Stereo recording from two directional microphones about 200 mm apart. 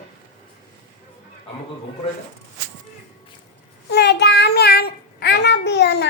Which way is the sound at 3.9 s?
55° left (ahead or behind).